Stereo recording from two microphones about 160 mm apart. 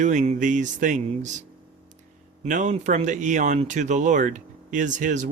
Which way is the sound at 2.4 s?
50° right (ahead or behind).